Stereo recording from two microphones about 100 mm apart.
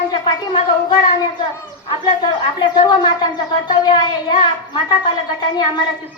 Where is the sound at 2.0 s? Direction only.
50° left (ahead or behind).